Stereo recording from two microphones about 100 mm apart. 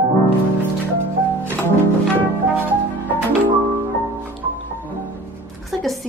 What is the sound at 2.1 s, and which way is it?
Music, 15° right (ahead or behind).